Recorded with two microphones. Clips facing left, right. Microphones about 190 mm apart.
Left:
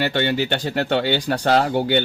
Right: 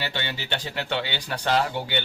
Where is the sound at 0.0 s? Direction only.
50° left (ahead or behind).